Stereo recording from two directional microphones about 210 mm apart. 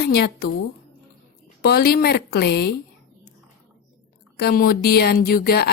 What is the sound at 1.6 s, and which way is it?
A woman's voice, 50° left (ahead or behind).